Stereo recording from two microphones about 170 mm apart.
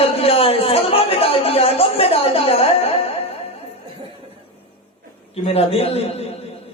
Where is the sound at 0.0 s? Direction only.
35° left (ahead or behind).